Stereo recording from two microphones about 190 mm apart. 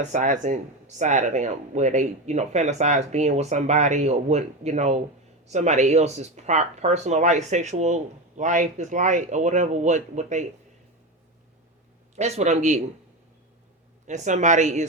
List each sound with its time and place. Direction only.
0.0 s speech: 40° right (ahead or behind)
12.1 s speech: 40° right (ahead or behind)
14.1 s speech: 40° right (ahead or behind)